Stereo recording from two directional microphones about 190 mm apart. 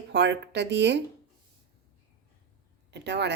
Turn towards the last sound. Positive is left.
turn(degrees=-65)  # may be behind; listen again after turning